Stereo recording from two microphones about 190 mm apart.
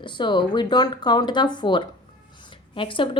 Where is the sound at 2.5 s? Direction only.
25° left (ahead or behind).